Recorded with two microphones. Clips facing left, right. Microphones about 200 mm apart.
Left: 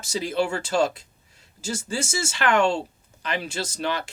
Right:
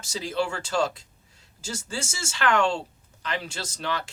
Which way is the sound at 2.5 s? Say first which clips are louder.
Left 3 dB; 10° left (ahead or behind).